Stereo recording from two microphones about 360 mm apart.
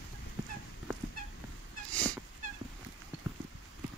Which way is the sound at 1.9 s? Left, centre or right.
Centre.